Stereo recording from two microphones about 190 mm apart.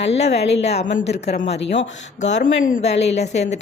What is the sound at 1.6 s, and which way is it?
Speech, 70° left (ahead or behind).